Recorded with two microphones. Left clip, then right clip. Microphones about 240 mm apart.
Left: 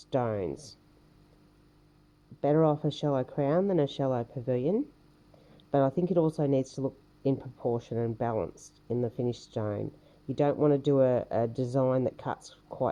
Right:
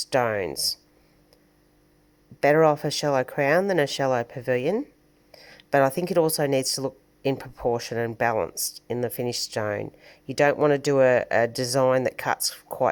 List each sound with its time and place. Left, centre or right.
0.1 s speech: right
2.4 s speech: right